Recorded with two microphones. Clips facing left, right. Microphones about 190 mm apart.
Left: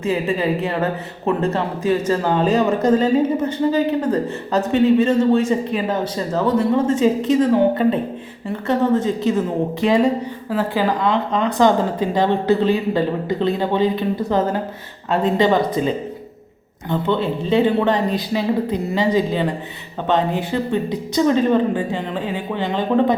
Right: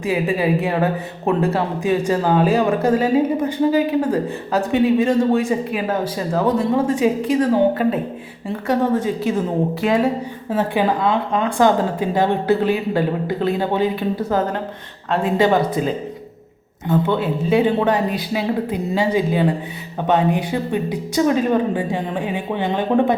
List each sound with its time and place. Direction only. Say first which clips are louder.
0.0 s a woman's voice: right 1 dB; 15° right (ahead or behind)
10.5 s a woman's voice: right 1 dB; 20° right (ahead or behind)
10.8 s a woman's voice: even; 10° right (ahead or behind)